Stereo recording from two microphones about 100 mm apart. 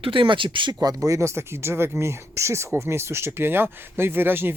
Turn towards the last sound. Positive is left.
turn(degrees=-20)  # may be behind; listen again after turning